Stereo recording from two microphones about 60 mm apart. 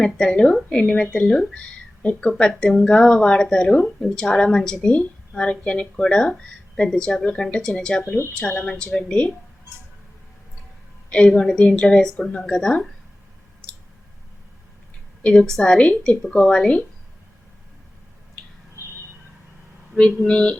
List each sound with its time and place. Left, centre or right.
0.0 s speech: centre
11.1 s speech: centre
15.2 s speech: centre
20.2 s speech: centre